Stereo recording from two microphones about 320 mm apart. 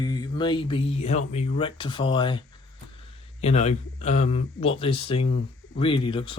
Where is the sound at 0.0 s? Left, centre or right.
Centre.